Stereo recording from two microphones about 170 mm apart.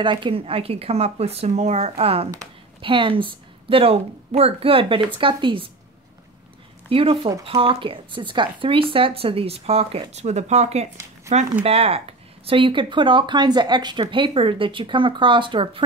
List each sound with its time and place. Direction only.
0.0 s speech: 30° right (ahead or behind)
6.9 s speech: 35° right (ahead or behind)